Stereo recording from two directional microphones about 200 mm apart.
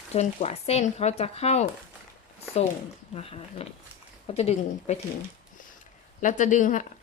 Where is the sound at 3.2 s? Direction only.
30° left (ahead or behind).